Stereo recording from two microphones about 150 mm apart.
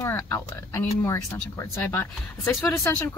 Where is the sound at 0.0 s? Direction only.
20° left (ahead or behind).